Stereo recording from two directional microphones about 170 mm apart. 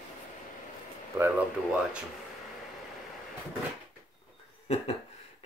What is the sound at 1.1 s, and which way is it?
Speech, 15° right (ahead or behind).